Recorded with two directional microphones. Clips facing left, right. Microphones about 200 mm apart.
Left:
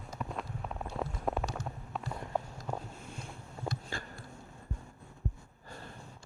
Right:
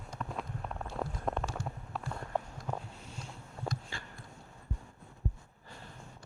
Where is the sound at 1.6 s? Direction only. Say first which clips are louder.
Even; centre (ahead or behind).